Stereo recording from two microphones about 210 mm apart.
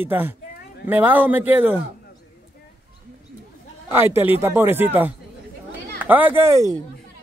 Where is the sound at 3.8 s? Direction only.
10° right (ahead or behind).